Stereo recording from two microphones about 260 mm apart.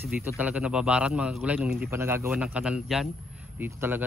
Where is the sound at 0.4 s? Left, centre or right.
Centre.